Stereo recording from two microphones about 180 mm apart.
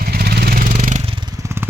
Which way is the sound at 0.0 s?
60° right (ahead or behind).